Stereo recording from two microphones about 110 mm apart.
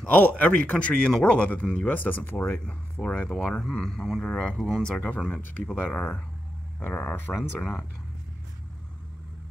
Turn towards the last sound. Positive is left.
turn(degrees=15)  # may be behind; listen again after turning